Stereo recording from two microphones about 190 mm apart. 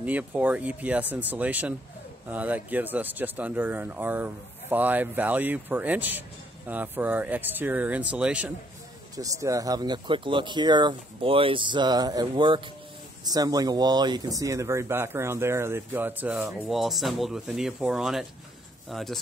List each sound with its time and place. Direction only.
0.0 s speech: 10° right (ahead or behind)
9.1 s speech: 15° right (ahead or behind); by 19.1 s centre (ahead or behind)